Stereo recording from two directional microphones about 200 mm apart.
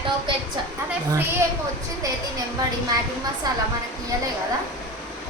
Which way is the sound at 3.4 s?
20° right (ahead or behind).